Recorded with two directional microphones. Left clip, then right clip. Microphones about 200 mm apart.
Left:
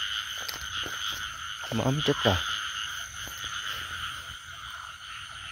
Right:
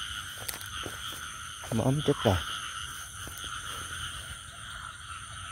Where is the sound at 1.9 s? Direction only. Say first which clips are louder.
Left 3 dB; 15° right (ahead or behind).